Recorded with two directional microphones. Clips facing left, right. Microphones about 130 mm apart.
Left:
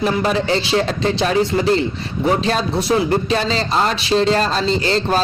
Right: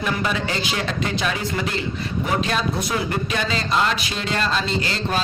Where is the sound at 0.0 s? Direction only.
40° left (ahead or behind).